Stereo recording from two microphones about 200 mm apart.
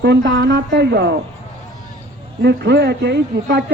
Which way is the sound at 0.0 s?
60° right (ahead or behind).